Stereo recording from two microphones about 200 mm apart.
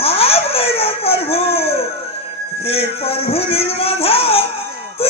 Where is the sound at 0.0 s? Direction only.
30° left (ahead or behind).